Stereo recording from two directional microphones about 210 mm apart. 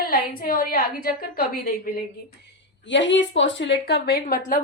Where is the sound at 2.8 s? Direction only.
60° left (ahead or behind); by 4.6 s 45° left (ahead or behind).